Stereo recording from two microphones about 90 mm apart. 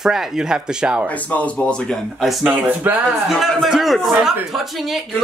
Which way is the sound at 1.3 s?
15° left (ahead or behind).